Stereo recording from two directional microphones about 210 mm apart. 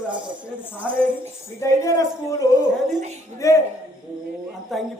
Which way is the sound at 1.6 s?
15° left (ahead or behind).